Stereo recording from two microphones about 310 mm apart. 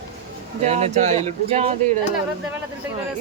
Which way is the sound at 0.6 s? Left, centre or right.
Right.